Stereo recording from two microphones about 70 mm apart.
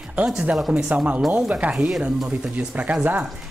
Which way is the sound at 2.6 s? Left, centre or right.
Centre.